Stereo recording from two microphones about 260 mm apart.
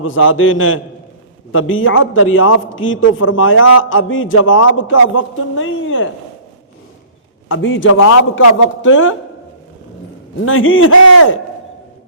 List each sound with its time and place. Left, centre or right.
0.0 s a man's voice: left
7.4 s a man's voice: left
7.9 s a man's voice: left
8.8 s a man's voice: left
10.4 s a man's voice: left